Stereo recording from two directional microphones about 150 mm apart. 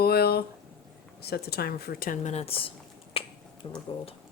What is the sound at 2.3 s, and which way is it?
Speech, 40° left (ahead or behind).